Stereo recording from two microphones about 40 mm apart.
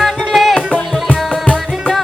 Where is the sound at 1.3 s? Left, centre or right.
Left.